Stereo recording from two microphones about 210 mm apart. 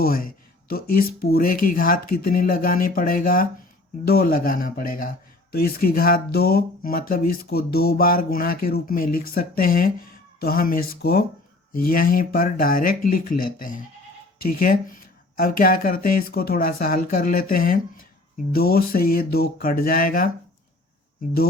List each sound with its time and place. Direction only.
0.0 s speech: 45° left (ahead or behind)